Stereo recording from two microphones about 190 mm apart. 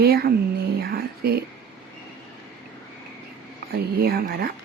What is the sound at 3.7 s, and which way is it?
Speech, 55° right (ahead or behind).